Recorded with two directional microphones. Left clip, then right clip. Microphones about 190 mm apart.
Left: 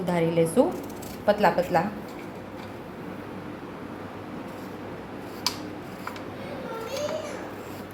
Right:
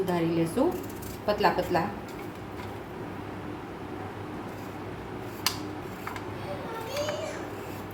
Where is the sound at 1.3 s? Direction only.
25° left (ahead or behind).